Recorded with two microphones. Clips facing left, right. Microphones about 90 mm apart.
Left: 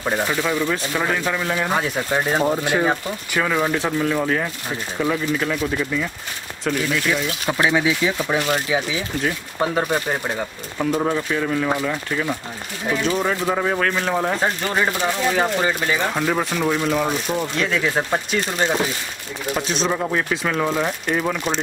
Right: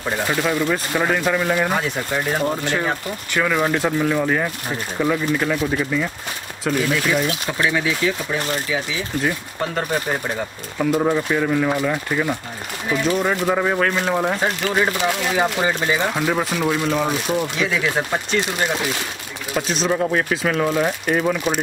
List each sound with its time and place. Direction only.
0.3 s speech: 10° right (ahead or behind)
2.4 s speech: 10° left (ahead or behind)
3.5 s speech: 5° right (ahead or behind)
5.4 s speech: 20° right (ahead or behind)
6.6 s speech: 5° right (ahead or behind)
7.5 s speech: 20° left (ahead or behind)
9.6 s speech: 10° left (ahead or behind)
11.0 s speech: 10° right (ahead or behind)
13.0 s speech: centre (ahead or behind)
19.5 s speech: centre (ahead or behind)